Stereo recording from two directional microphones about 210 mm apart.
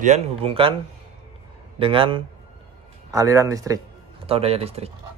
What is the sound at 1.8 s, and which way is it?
Speech, 25° right (ahead or behind).